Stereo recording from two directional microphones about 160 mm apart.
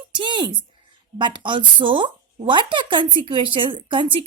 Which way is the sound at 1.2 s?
30° right (ahead or behind).